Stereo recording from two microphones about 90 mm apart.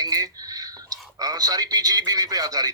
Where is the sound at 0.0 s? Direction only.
45° right (ahead or behind).